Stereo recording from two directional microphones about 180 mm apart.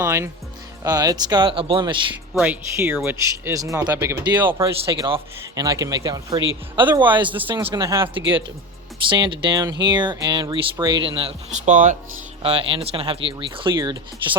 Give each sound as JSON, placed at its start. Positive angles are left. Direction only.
{"t": 0.0, "sound": "speech", "side_deg": -15}
{"t": 2.3, "sound": "speech", "side_deg": -10}
{"t": 4.6, "sound": "speech", "side_deg": -30}
{"t": 8.2, "sound": "speech", "side_deg": -90}
{"t": 9.0, "sound": "speech", "side_deg": -25}
{"t": 12.4, "sound": "speech", "side_deg": -30}